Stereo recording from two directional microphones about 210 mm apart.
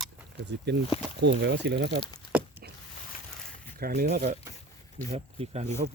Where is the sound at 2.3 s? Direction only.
5° right (ahead or behind).